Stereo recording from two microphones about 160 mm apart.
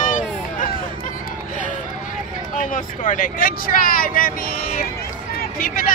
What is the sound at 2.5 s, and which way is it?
Vehicle, 55° left (ahead or behind).